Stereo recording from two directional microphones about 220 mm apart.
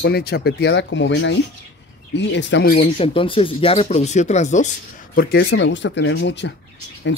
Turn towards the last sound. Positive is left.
turn(degrees=55)  # may be behind; listen again after turning